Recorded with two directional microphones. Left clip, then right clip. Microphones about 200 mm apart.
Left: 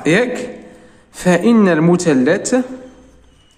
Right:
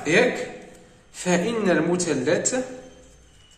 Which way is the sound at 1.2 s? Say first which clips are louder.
Left 10 dB; 40° left (ahead or behind).